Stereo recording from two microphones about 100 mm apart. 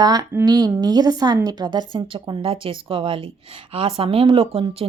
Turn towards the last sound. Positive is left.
turn(degrees=-65)  # may be behind; listen again after turning